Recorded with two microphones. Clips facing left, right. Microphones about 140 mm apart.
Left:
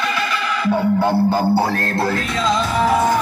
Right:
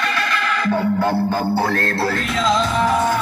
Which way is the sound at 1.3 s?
15° left (ahead or behind).